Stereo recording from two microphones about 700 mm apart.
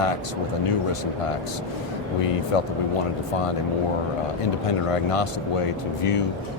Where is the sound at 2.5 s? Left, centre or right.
Left.